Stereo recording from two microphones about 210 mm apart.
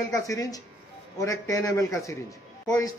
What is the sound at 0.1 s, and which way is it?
A man's voice, 15° left (ahead or behind).